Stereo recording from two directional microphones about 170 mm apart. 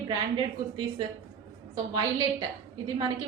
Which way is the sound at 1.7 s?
25° right (ahead or behind).